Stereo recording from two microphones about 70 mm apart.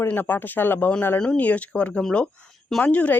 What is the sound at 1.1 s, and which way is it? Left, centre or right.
Speech, centre.